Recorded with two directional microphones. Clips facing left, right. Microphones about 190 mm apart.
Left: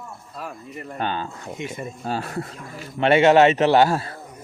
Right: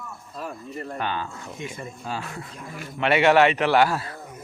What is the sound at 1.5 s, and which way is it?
Speech, 20° left (ahead or behind).